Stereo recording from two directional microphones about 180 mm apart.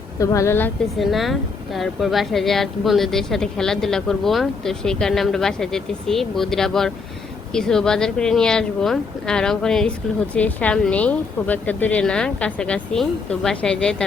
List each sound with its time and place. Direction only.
0.2 s a woman's voice: 15° left (ahead or behind)
0.9 s a woman's voice: centre (ahead or behind)